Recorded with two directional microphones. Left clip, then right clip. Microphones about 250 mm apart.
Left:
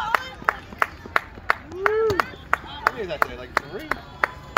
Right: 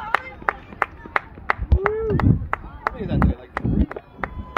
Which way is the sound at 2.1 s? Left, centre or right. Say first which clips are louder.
Left 1 dB; right.